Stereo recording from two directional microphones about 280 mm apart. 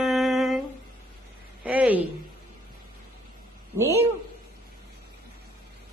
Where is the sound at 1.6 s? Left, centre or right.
Centre.